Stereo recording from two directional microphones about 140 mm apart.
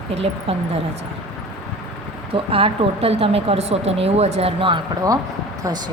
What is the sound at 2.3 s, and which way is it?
Speech, 40° right (ahead or behind).